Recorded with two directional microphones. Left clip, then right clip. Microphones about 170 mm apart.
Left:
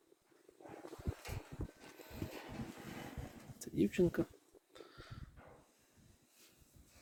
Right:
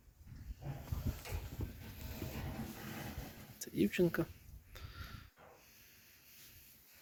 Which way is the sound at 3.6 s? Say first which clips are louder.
Even; 15° left (ahead or behind).